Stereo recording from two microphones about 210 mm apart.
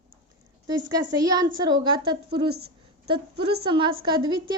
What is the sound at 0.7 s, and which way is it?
A woman's voice, 20° right (ahead or behind).